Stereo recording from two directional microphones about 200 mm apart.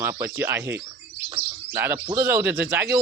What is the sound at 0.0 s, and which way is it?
Speech, 15° right (ahead or behind).